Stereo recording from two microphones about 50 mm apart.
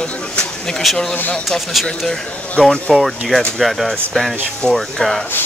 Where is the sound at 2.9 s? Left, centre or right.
Centre.